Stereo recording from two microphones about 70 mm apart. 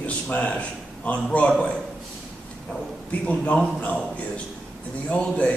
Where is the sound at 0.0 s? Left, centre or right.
Centre.